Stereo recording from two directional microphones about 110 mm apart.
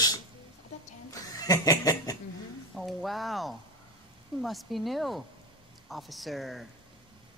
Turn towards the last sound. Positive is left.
turn(degrees=0)  # may be behind; listen again after turning